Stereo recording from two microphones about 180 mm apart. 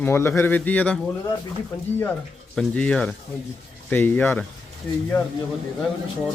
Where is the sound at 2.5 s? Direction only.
5° left (ahead or behind).